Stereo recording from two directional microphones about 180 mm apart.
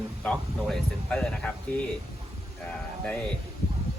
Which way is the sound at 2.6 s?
5° left (ahead or behind).